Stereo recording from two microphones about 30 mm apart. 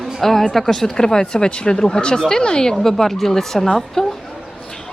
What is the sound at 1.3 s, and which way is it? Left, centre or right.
Speech, left.